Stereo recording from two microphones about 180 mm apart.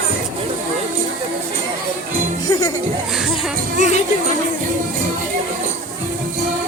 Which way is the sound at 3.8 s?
40° left (ahead or behind).